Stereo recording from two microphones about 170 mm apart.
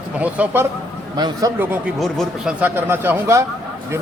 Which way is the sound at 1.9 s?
Centre (ahead or behind).